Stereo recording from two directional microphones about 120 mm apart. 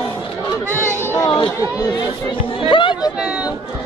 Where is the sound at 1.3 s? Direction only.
45° left (ahead or behind).